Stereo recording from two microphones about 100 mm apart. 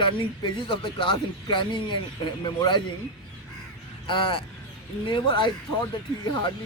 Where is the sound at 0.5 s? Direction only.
55° left (ahead or behind).